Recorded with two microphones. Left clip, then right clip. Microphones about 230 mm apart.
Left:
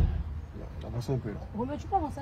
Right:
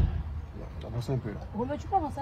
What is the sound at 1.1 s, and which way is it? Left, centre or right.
Speech, right.